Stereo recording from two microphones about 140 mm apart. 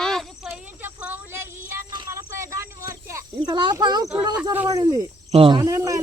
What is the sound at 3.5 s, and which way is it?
Speech, 30° right (ahead or behind).